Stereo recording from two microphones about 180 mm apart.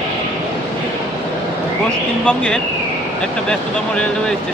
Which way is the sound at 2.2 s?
5° left (ahead or behind).